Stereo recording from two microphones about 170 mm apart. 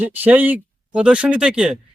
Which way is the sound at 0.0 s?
10° right (ahead or behind).